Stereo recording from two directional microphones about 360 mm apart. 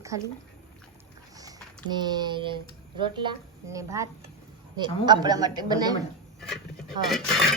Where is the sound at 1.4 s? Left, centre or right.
Centre.